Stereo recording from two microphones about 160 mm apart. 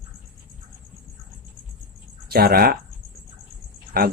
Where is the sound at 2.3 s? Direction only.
70° right (ahead or behind).